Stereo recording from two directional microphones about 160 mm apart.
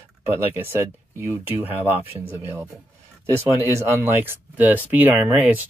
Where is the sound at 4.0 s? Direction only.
10° right (ahead or behind).